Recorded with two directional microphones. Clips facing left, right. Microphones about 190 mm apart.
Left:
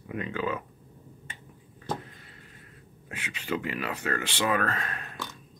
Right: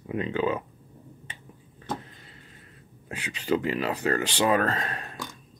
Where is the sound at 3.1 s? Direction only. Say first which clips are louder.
Right 6 dB; 35° right (ahead or behind).